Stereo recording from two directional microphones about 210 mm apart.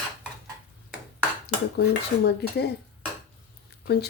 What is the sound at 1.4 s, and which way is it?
Dishes, 50° left (ahead or behind).